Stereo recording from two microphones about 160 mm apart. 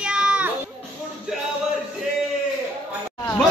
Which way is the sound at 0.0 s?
5° right (ahead or behind).